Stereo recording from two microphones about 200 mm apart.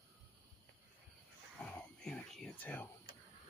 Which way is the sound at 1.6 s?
5° left (ahead or behind).